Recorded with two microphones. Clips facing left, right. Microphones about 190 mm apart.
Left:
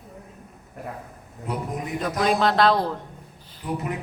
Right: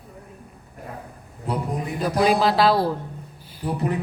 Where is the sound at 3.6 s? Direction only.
35° right (ahead or behind).